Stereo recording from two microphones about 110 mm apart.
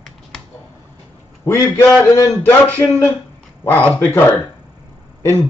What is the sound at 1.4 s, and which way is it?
Speech, 25° left (ahead or behind).